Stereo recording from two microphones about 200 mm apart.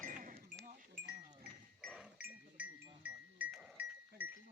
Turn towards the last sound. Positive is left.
turn(degrees=-5)  # may be behind; listen again after turning